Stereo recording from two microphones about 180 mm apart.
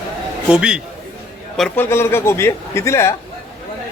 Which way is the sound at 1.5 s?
5° left (ahead or behind).